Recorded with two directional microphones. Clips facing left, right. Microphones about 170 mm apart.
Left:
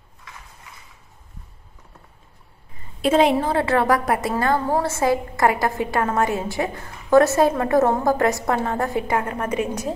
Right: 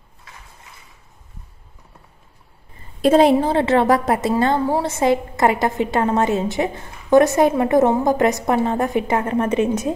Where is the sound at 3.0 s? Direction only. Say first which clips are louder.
Right 4 dB; 40° right (ahead or behind).